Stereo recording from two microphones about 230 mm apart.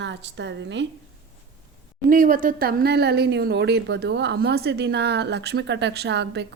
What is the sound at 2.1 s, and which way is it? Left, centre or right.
A woman's voice, right.